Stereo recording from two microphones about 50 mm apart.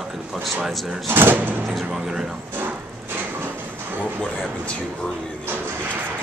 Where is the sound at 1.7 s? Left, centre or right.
Centre.